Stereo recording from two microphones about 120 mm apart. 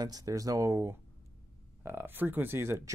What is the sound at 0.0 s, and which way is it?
Speech, 30° right (ahead or behind).